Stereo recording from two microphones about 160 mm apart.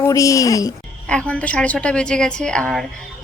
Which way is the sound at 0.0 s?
20° left (ahead or behind).